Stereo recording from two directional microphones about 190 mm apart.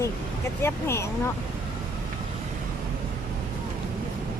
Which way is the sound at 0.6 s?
15° left (ahead or behind).